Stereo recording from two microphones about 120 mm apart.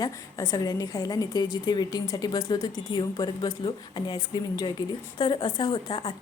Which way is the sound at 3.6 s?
45° left (ahead or behind).